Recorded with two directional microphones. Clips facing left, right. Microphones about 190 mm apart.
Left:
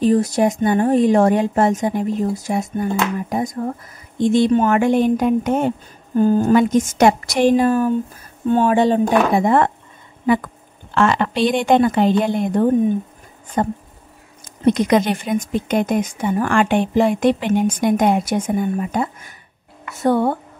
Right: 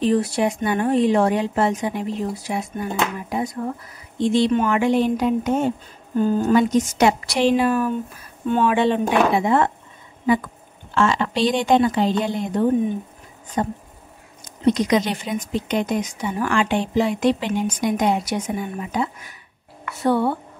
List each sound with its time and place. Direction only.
0.0 s speech: 40° left (ahead or behind)
6.1 s a woman's voice: 45° left (ahead or behind)